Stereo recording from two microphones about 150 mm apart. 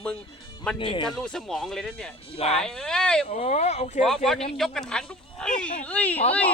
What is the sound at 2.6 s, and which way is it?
Speech, 5° left (ahead or behind).